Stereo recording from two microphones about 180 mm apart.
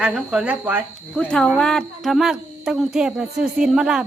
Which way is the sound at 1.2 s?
5° left (ahead or behind).